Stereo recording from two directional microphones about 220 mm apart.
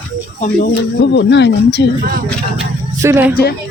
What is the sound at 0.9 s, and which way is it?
Speech, 50° left (ahead or behind).